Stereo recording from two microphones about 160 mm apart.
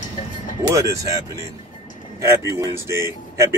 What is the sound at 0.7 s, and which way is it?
Speech, 20° right (ahead or behind).